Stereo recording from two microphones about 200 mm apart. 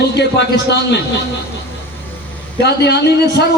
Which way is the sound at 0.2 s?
60° left (ahead or behind).